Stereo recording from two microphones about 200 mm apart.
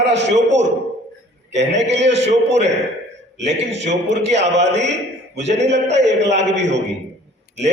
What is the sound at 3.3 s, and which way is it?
Speech, 60° right (ahead or behind).